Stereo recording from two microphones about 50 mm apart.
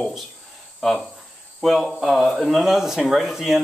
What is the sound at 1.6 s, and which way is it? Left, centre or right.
Speech, centre.